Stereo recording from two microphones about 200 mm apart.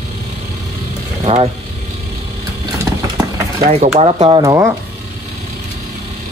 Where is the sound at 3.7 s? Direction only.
35° right (ahead or behind).